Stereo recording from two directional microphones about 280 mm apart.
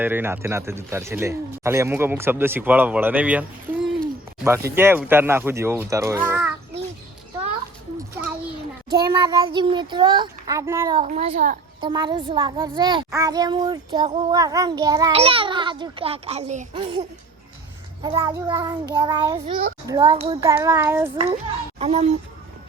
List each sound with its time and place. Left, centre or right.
0.0 s speech: centre
9.0 s speech: centre
11.0 s a child's voice: right
18.0 s speech: centre
21.8 s a child's voice: right